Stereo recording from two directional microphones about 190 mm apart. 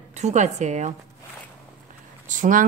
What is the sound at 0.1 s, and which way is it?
Speech, 35° right (ahead or behind).